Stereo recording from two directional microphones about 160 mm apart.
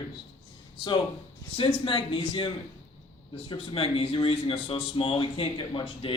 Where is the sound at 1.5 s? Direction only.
35° left (ahead or behind).